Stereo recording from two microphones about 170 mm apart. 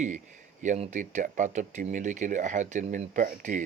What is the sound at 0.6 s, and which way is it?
Speech, 45° right (ahead or behind).